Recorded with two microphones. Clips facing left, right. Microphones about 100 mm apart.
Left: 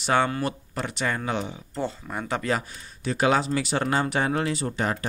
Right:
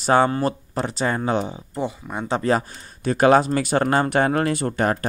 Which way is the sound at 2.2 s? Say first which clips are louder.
Right 6 dB; 35° right (ahead or behind).